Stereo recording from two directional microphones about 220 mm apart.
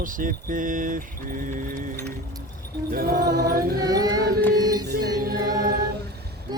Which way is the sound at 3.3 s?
45° right (ahead or behind).